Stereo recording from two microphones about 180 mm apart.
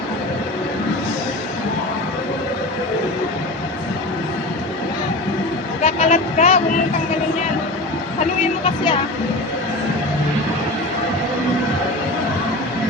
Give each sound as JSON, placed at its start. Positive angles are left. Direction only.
{"t": 5.8, "sound": "vehicle", "side_deg": 35}